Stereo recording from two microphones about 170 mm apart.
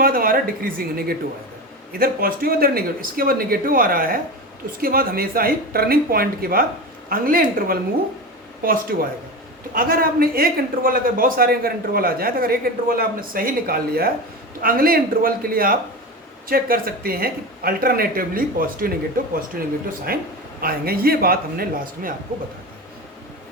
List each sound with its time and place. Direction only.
0.0 s a man's voice: 55° right (ahead or behind)